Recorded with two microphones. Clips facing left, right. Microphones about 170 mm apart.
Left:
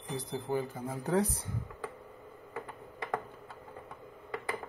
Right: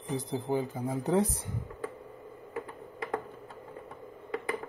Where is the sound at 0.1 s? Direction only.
20° right (ahead or behind).